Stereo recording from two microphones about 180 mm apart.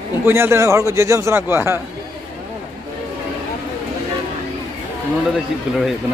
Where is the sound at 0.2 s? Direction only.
15° right (ahead or behind).